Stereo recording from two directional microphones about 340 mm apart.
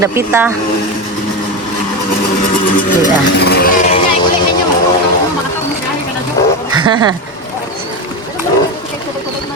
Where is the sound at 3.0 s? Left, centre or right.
Left.